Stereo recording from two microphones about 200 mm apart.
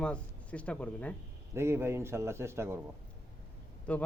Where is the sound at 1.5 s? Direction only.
10° right (ahead or behind).